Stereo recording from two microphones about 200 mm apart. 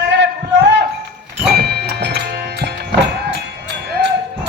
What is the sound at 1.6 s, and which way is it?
Music, 55° right (ahead or behind).